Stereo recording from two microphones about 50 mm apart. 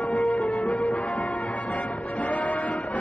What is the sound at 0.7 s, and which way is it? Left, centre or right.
Music, left.